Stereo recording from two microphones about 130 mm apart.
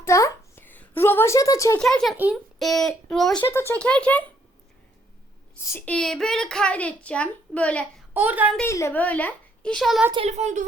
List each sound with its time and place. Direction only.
0.0 s a sound: 25° left (ahead or behind)
1.8 s a child's voice: 5° left (ahead or behind)
3.4 s a child's voice: 20° left (ahead or behind)
5.5 s a woman's voice: 20° left (ahead or behind)
5.8 s a child's voice: 5° left (ahead or behind)
8.1 s speech: 15° right (ahead or behind)
8.6 s a child's voice: 20° left (ahead or behind); by 10.0 s centre (ahead or behind)
10.2 s a woman's voice: 60° right (ahead or behind)